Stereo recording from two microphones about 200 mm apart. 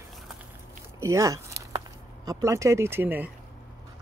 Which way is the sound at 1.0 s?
15° right (ahead or behind).